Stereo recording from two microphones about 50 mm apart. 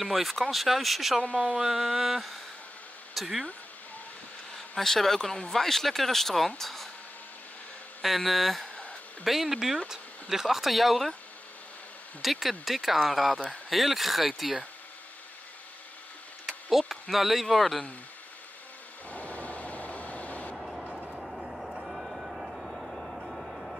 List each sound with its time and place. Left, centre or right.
0.0 s speech: centre
1.6 s a sound: centre
3.2 s speech: centre
4.6 s speech: centre
8.0 s speech: centre
12.2 s speech: centre
16.7 s speech: centre
19.0 s vehicle: left
20.5 s vehicle: centre